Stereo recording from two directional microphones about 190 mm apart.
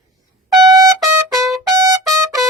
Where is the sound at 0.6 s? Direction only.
20° right (ahead or behind).